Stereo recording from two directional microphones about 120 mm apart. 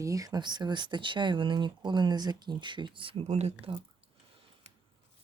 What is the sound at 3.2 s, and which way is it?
Speech, 65° right (ahead or behind).